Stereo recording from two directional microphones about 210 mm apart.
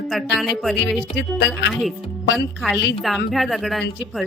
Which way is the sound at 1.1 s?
55° left (ahead or behind).